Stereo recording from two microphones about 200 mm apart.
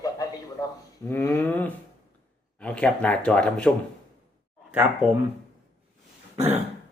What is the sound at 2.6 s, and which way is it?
Speech, 5° left (ahead or behind).